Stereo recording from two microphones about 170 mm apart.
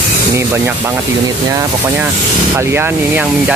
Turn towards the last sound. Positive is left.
turn(degrees=-10)  # may be behind; listen again after turning